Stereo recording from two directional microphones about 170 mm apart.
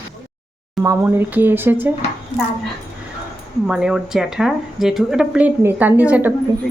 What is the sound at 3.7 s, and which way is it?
Speech, 5° right (ahead or behind).